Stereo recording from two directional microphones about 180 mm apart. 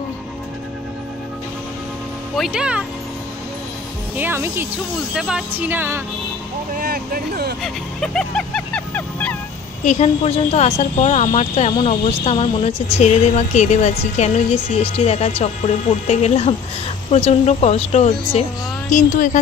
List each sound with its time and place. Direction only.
2.3 s speech: 5° right (ahead or behind)
4.2 s speech: 10° right (ahead or behind)
6.8 s vehicle: 55° right (ahead or behind)
7.6 s vehicle: 5° left (ahead or behind)
9.8 s speech: 35° left (ahead or behind)